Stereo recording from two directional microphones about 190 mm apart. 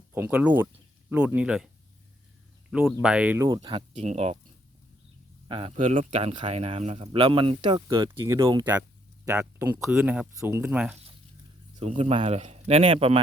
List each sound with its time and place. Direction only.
0.1 s speech: 10° right (ahead or behind); by 3.8 s 25° right (ahead or behind)
3.9 s a man's voice: 35° right (ahead or behind)
5.5 s speech: 30° right (ahead or behind)
5.7 s speech: 40° right (ahead or behind); by 10.9 s 10° right (ahead or behind)
11.8 s a man's voice: 30° right (ahead or behind)